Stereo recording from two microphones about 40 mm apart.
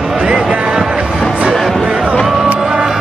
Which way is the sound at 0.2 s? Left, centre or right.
Right.